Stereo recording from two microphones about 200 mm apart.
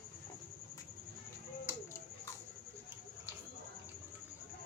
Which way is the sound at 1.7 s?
10° right (ahead or behind).